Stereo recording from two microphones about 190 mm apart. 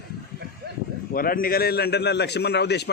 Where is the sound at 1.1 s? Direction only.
50° left (ahead or behind).